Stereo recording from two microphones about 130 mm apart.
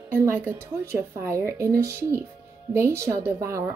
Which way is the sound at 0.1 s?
20° right (ahead or behind).